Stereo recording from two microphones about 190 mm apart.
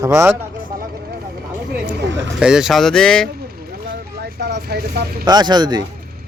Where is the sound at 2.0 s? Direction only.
70° right (ahead or behind).